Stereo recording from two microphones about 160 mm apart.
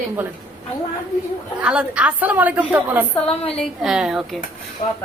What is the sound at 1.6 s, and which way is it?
A woman's voice, 5° right (ahead or behind).